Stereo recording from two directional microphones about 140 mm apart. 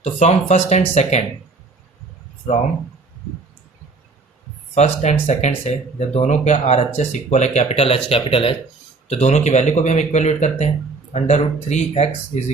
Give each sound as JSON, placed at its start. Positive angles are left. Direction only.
{"t": 0.0, "sound": "speech", "side_deg": 55}
{"t": 4.7, "sound": "speech", "side_deg": 55}
{"t": 9.0, "sound": "speech", "side_deg": 55}